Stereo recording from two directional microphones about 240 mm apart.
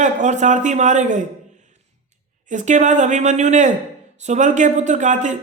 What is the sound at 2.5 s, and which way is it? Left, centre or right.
A man's voice, right.